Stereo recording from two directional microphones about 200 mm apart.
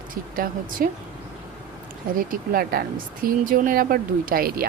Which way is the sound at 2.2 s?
45° right (ahead or behind).